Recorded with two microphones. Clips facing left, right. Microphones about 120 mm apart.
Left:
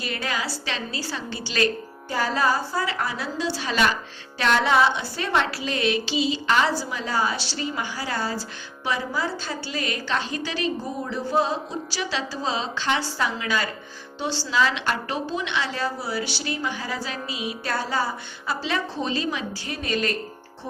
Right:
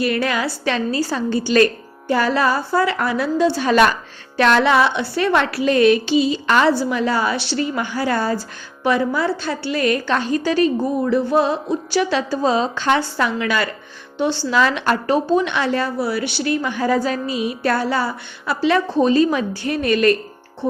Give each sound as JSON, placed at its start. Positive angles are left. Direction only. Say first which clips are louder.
{"t": 0.0, "sound": "a woman's voice", "louder": "right 9 dB", "side_deg": -65}
{"t": 4.4, "sound": "a woman's voice", "louder": "right 5 dB", "side_deg": -70}
{"t": 11.0, "sound": "a woman's voice", "louder": "right 6 dB", "side_deg": -65}
{"t": 14.2, "sound": "a woman's voice", "louder": "right 6 dB", "side_deg": -55}